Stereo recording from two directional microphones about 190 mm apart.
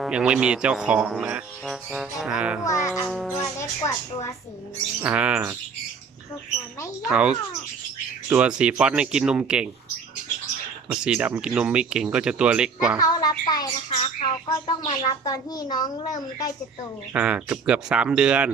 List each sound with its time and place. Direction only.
0.0 s speech: 5° right (ahead or behind)
2.6 s speech: 15° left (ahead or behind)
5.0 s bird: 5° right (ahead or behind)
7.1 s bird: 5° right (ahead or behind)
8.3 s speech: 5° right (ahead or behind)
10.8 s speech: 5° right (ahead or behind)
13.0 s music: 20° left (ahead or behind)
13.9 s a child's voice: 35° left (ahead or behind)
17.2 s speech: 5° right (ahead or behind)